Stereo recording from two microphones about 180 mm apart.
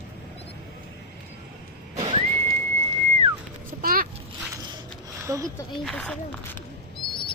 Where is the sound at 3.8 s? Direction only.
55° right (ahead or behind).